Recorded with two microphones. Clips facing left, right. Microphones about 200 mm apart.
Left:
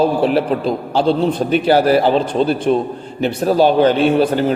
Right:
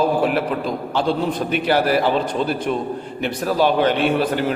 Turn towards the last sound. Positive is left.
turn(degrees=30)  # may be behind; listen again after turning